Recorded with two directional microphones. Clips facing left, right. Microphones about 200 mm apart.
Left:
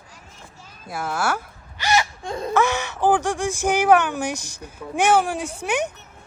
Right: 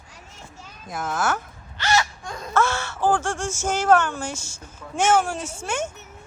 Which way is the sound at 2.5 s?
15° left (ahead or behind).